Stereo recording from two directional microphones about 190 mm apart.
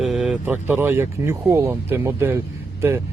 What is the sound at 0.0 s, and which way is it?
Speech, centre (ahead or behind).